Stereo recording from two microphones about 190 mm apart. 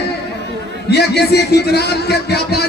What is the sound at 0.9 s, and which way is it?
Speech, 60° left (ahead or behind).